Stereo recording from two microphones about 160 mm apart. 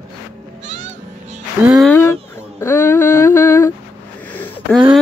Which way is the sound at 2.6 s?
15° left (ahead or behind).